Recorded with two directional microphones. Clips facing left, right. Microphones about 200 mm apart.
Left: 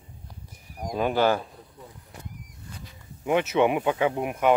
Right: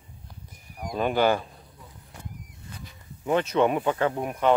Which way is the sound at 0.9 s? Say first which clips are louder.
Even; 5° left (ahead or behind).